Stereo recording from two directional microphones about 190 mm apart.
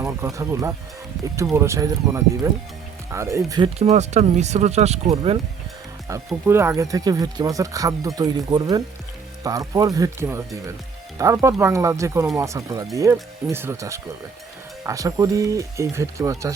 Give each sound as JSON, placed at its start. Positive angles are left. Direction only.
{"t": 0.0, "sound": "speech", "side_deg": -15}
{"t": 3.8, "sound": "speech", "side_deg": -35}
{"t": 6.4, "sound": "speech", "side_deg": -15}